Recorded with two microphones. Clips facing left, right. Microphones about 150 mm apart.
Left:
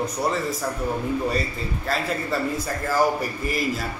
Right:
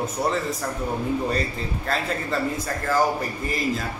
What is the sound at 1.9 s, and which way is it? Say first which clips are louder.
Speech: even; 5° left (ahead or behind).